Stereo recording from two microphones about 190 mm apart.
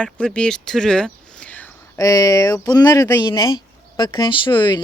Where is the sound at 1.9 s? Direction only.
20° left (ahead or behind).